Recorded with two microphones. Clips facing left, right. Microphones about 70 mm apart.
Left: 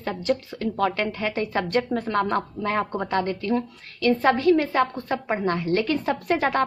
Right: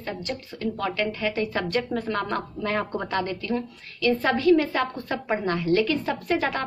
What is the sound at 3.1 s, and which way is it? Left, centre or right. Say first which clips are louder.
A woman's voice: left 4 dB; left.